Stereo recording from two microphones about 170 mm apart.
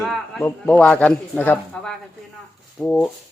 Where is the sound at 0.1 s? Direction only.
5° left (ahead or behind).